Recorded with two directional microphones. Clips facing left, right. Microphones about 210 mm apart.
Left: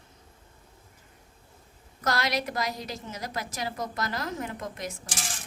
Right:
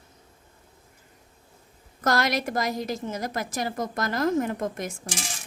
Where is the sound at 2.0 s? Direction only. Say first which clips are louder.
Right 4 dB; 50° right (ahead or behind).